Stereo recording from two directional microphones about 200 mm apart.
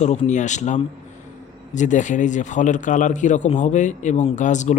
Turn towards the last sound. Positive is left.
turn(degrees=35)  # may be behind; listen again after turning